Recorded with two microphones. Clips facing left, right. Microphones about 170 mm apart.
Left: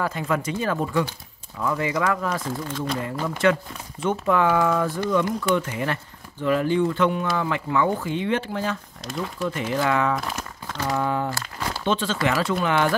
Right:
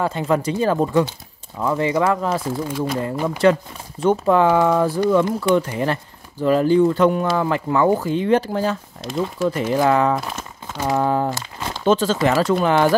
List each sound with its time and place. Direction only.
0.0 s speech: 30° right (ahead or behind)
2.4 s speech: 10° right (ahead or behind)
3.4 s speech: 35° right (ahead or behind)
5.6 s speech: 35° right (ahead or behind)
9.0 s speech: centre (ahead or behind)
9.4 s speech: 40° right (ahead or behind)
10.2 s crumpling: 5° right (ahead or behind)
10.8 s speech: 30° right (ahead or behind)
11.2 s crumpling: 20° right (ahead or behind)
11.8 s speech: 40° right (ahead or behind)